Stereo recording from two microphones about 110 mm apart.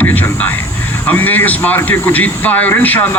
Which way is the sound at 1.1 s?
15° left (ahead or behind).